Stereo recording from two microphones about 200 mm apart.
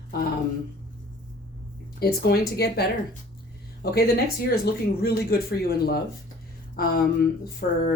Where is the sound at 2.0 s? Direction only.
50° left (ahead or behind).